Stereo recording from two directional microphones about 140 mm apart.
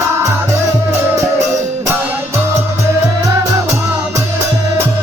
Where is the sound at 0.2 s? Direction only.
20° right (ahead or behind).